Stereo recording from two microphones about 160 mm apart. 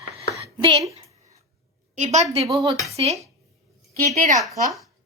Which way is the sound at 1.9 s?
45° right (ahead or behind).